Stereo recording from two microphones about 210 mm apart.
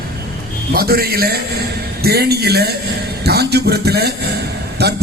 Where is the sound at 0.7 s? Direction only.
45° right (ahead or behind).